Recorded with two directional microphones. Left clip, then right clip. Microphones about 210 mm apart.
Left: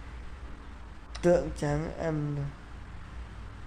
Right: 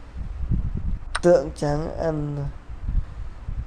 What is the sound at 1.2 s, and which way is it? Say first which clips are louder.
Speech: right 7 dB; 15° right (ahead or behind).